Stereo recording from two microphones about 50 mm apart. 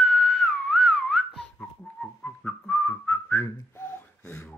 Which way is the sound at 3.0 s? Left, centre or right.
Left.